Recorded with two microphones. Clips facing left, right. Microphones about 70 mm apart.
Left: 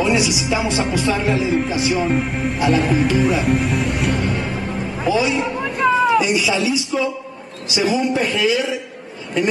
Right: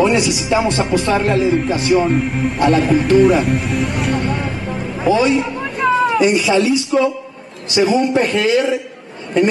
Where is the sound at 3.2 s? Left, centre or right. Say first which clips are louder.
Right 5 dB; centre.